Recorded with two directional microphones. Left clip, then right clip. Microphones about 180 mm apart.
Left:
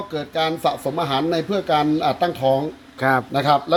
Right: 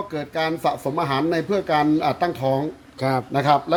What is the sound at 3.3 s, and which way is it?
Speech, 20° left (ahead or behind).